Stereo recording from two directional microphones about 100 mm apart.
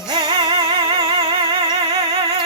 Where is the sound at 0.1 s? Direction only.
50° right (ahead or behind).